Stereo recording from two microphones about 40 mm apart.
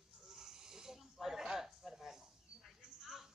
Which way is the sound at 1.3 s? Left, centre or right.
Centre.